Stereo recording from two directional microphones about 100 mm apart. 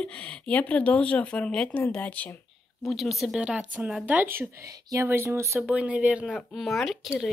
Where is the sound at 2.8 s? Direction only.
Centre (ahead or behind); by 5.6 s 25° right (ahead or behind).